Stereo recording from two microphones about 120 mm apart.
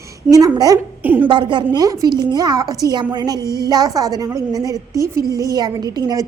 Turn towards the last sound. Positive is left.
turn(degrees=-30)  # may be behind; listen again after turning